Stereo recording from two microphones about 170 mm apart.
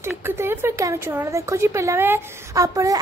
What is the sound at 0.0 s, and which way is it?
Speech, 15° right (ahead or behind).